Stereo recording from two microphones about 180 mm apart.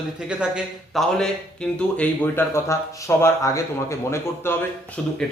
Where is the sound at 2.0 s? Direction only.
15° left (ahead or behind).